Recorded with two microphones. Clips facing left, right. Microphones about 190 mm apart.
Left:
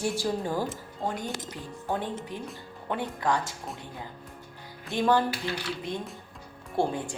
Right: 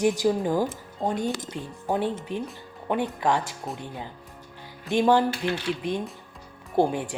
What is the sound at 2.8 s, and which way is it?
Speech, 20° right (ahead or behind).